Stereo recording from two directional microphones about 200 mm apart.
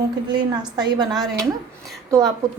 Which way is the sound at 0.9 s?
20° right (ahead or behind).